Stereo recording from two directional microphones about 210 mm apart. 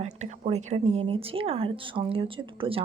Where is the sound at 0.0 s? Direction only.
35° right (ahead or behind).